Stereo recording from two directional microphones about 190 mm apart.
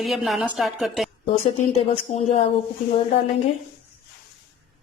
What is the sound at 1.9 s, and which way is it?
Speech, 35° left (ahead or behind).